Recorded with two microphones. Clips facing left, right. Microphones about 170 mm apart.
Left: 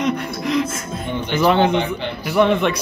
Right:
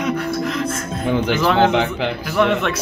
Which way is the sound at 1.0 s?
90° right.